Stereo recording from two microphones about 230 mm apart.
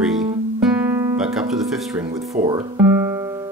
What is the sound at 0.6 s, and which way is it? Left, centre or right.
Guitar, centre.